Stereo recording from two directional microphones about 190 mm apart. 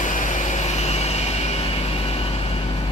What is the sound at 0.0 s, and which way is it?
Vehicle, 40° left (ahead or behind).